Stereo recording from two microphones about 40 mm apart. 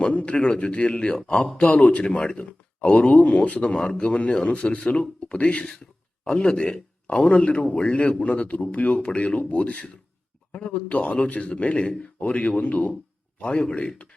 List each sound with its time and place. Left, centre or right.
0.1 s a man's voice: left
2.5 s a sound: left
3.2 s speech: left
3.6 s a man's voice: left
5.8 s a sound: centre
6.4 s a man's voice: left
13.4 s a man's voice: left